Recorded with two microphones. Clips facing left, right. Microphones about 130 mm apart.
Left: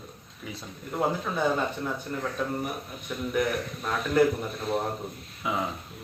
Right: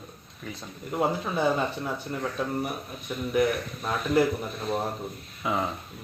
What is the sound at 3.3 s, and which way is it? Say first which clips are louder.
Speech: right 3 dB; 5° right (ahead or behind).